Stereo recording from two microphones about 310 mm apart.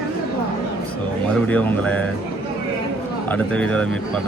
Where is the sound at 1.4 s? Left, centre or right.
Centre.